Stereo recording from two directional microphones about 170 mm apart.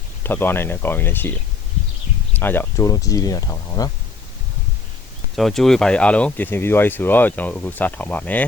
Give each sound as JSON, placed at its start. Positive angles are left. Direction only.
{"t": 0.2, "sound": "speech", "side_deg": 10}
{"t": 2.3, "sound": "speech", "side_deg": 10}
{"t": 5.4, "sound": "speech", "side_deg": 0}